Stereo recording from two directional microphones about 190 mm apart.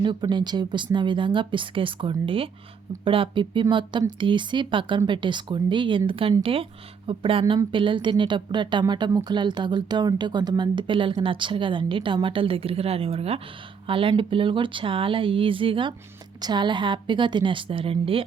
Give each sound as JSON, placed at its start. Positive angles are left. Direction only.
{"t": 0.0, "sound": "a woman's voice", "side_deg": -25}